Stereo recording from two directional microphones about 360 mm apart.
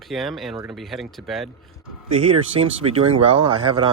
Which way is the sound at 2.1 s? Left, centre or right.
Centre.